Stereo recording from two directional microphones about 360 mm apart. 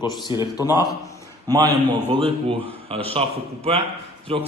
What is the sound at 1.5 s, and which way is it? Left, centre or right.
A man's voice, centre.